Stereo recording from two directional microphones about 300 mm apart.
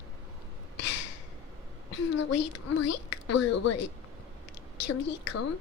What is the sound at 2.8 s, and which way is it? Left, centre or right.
Speech, left.